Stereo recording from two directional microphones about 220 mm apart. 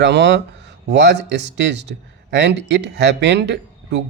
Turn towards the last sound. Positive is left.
turn(degrees=-50)  # may be behind; listen again after turning